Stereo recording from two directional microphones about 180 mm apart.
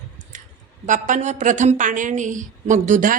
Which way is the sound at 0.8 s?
45° right (ahead or behind).